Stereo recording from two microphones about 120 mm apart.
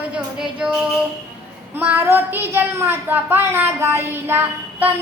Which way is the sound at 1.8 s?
15° right (ahead or behind).